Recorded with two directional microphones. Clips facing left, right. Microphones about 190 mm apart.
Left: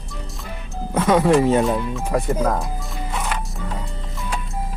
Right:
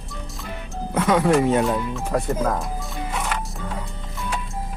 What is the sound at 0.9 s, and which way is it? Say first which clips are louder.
Speech: left 2 dB; 25° left (ahead or behind).